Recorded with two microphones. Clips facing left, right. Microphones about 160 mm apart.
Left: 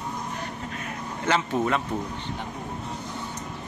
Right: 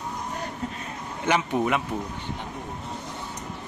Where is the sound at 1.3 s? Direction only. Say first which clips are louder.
Right 1 dB; 15° right (ahead or behind).